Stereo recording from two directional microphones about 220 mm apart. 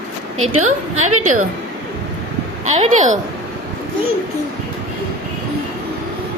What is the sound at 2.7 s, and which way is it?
Speech, 30° right (ahead or behind).